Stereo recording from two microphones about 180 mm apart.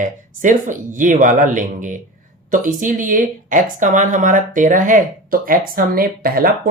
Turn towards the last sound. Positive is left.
turn(degrees=-55)  # may be behind; listen again after turning